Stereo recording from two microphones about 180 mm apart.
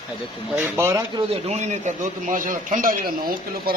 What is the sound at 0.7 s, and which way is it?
Speech, 15° right (ahead or behind).